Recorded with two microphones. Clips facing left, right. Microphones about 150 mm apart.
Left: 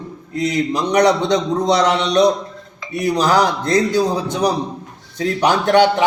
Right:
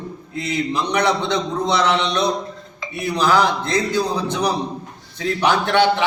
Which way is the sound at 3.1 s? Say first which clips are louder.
Even; 40° left (ahead or behind).